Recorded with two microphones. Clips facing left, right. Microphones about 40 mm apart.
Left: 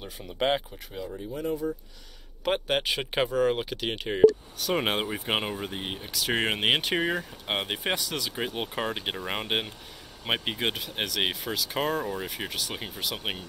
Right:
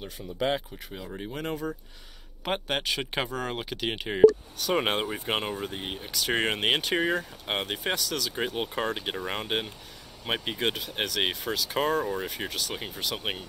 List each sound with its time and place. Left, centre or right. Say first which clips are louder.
1.3 s speech: left 3 dB; right
2.4 s speech: left 3 dB; centre
10.6 s speech: right 1 dB; centre